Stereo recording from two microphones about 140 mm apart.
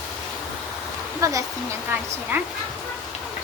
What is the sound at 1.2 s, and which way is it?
Speech, 25° right (ahead or behind).